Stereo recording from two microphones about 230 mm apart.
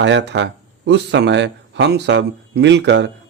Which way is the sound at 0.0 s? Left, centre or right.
Right.